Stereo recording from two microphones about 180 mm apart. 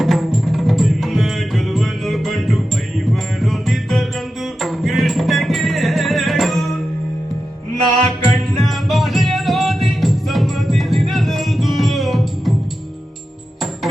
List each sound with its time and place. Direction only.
0.0 s music: centre (ahead or behind)
8.0 s music: centre (ahead or behind)